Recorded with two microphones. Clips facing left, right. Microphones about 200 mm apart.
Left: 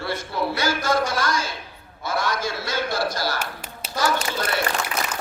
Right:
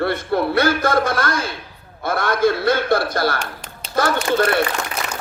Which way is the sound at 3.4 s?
5° left (ahead or behind).